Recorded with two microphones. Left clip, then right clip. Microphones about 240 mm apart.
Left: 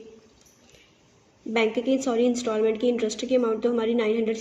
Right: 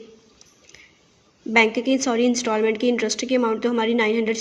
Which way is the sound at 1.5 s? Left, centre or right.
Right.